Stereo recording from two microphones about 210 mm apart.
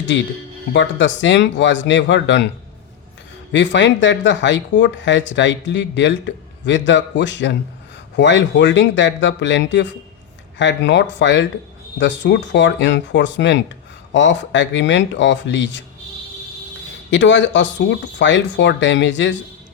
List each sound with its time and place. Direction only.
0.7 s speech: 60° left (ahead or behind)
3.5 s speech: 60° left (ahead or behind)
17.1 s speech: 60° left (ahead or behind)